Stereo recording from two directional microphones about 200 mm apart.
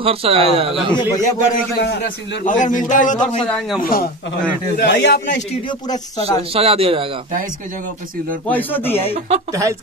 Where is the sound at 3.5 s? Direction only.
5° left (ahead or behind).